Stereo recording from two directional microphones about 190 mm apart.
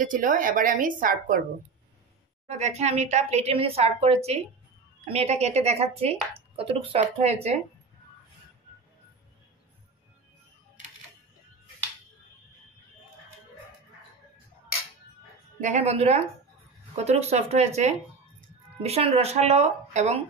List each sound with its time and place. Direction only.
0.0 s speech: 45° right (ahead or behind)
2.4 s speech: 35° right (ahead or behind)
15.6 s speech: 35° right (ahead or behind)